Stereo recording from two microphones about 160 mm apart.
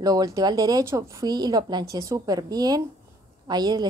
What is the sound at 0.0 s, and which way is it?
Speech, 25° right (ahead or behind).